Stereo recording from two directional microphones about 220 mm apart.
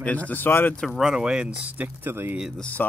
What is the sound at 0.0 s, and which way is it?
Speech, 5° left (ahead or behind).